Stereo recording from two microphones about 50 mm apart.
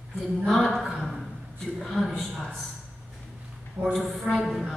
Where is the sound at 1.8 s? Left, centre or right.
Centre.